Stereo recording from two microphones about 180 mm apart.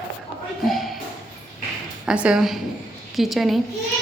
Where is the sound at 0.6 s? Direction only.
Centre (ahead or behind).